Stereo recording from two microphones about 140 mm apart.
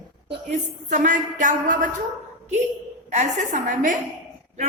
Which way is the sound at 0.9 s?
60° right (ahead or behind).